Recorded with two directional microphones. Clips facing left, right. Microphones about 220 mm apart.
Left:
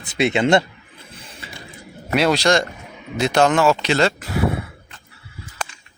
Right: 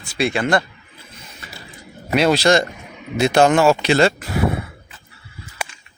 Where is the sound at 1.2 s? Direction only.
30° left (ahead or behind).